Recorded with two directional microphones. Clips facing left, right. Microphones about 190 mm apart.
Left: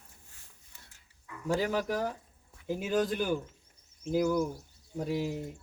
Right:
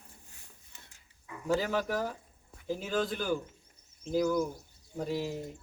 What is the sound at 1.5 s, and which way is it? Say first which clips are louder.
Speech: even; 15° left (ahead or behind).